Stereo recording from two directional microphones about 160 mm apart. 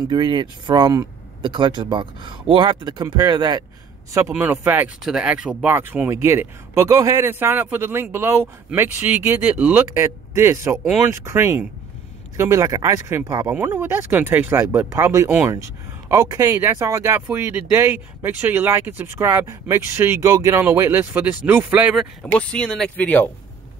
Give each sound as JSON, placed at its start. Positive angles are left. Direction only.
{"t": 0.1, "sound": "speech", "side_deg": -25}
{"t": 4.3, "sound": "speech", "side_deg": -10}
{"t": 22.2, "sound": "speech", "side_deg": 5}